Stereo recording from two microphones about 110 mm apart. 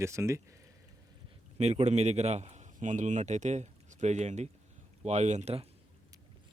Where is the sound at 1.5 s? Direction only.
85° right.